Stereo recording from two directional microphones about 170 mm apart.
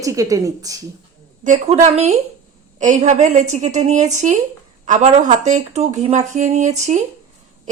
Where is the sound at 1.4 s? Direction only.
45° right (ahead or behind).